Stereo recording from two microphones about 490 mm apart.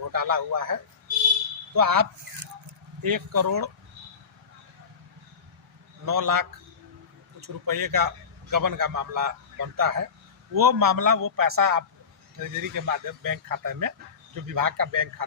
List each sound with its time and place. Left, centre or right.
0.1 s a man's voice: right
6.1 s a man's voice: right